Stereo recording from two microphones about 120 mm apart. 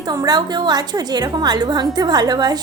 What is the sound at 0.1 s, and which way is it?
A woman's voice, 35° right (ahead or behind).